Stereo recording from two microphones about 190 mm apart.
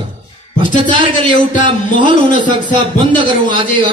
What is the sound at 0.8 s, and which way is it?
A man's voice, 25° right (ahead or behind).